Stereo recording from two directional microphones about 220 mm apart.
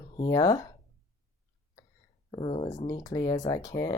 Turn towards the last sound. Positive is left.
turn(degrees=20)  # may be behind; listen again after turning